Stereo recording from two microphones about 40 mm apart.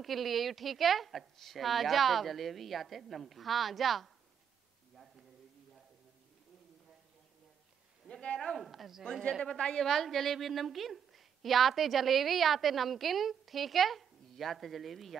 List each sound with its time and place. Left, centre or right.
0.0 s a woman's voice: centre
4.9 s a sound: centre
8.1 s speech: left
8.5 s a woman's voice: centre
9.6 s a woman's voice: left
9.8 s a woman's voice: centre